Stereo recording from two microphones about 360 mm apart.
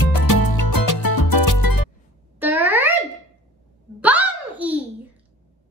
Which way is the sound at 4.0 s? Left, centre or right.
Centre.